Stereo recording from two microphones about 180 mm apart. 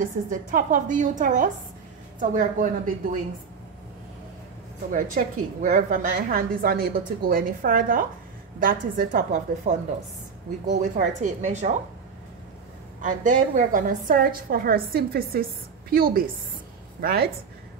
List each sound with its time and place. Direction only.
0.0 s a woman's voice: 45° right (ahead or behind)
4.9 s a woman's voice: 45° right (ahead or behind)
13.0 s a woman's voice: 45° right (ahead or behind)